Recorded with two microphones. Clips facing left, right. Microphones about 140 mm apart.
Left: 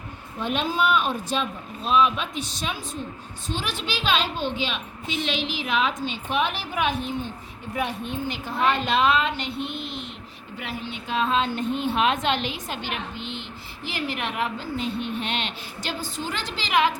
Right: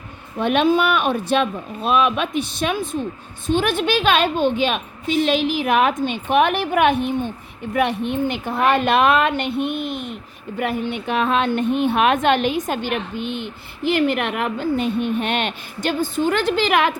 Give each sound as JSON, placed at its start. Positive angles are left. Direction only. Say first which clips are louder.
{"t": 0.3, "sound": "a woman's voice", "louder": "right 9 dB", "side_deg": -65}